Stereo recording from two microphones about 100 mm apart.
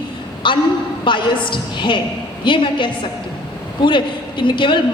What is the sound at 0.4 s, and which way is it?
A woman's voice, 55° left (ahead or behind).